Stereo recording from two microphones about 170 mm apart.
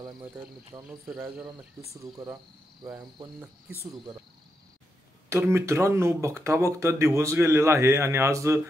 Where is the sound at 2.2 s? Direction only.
20° right (ahead or behind).